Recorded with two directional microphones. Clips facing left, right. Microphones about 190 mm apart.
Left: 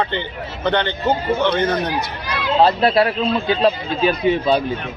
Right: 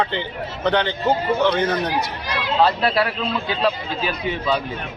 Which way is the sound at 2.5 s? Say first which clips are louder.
Left 4 dB; 25° left (ahead or behind).